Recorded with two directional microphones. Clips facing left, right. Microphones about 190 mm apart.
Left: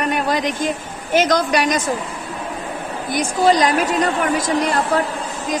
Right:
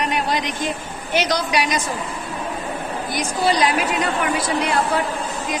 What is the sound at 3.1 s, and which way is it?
A woman's voice, 45° left (ahead or behind).